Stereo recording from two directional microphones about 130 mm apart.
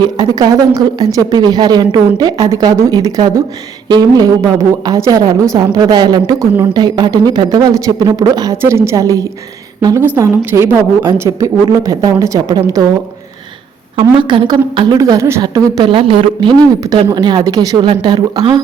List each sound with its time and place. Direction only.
0.0 s a woman's voice: 30° right (ahead or behind)
13.9 s a woman's voice: 40° right (ahead or behind)